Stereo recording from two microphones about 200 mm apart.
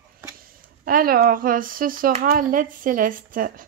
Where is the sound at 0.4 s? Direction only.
45° right (ahead or behind).